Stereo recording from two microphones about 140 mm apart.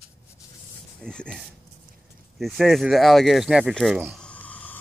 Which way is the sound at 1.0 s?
5° left (ahead or behind).